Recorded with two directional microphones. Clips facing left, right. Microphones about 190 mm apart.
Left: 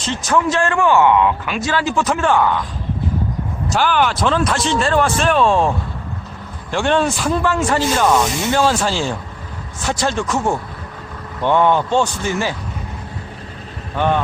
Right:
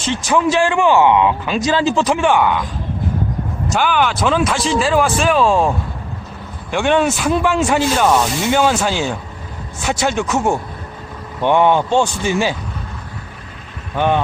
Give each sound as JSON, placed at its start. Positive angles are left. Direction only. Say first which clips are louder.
{"t": 0.1, "sound": "speech", "louder": "right 2 dB", "side_deg": -15}
{"t": 3.7, "sound": "speech", "louder": "even", "side_deg": 0}
{"t": 7.3, "sound": "speech", "louder": "right 2 dB", "side_deg": -15}
{"t": 7.7, "sound": "speech", "louder": "even", "side_deg": -5}
{"t": 11.4, "sound": "speech", "louder": "right 2 dB", "side_deg": -20}